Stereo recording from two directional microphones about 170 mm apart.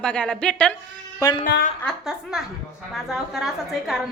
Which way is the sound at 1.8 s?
Centre (ahead or behind).